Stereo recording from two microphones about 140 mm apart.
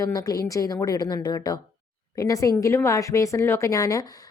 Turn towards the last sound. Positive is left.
turn(degrees=25)  # may be behind; listen again after turning